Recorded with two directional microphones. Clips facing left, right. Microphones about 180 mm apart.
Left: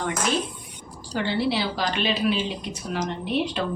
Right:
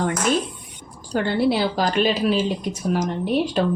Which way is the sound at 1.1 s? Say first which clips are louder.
Right 5 dB; 50° right (ahead or behind).